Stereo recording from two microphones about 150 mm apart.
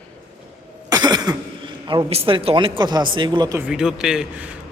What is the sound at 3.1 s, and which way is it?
Speech, 30° right (ahead or behind).